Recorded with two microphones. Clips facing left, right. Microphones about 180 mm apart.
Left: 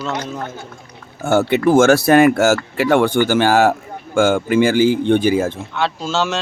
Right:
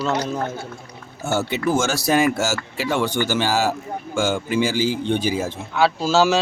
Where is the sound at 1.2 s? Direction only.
55° left (ahead or behind).